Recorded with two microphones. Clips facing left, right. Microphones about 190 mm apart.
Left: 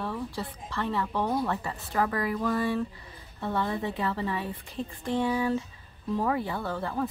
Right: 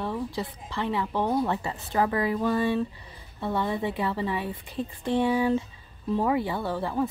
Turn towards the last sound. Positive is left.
turn(degrees=-15)  # may be behind; listen again after turning